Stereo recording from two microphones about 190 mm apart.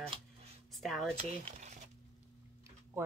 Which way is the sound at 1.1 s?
35° right (ahead or behind).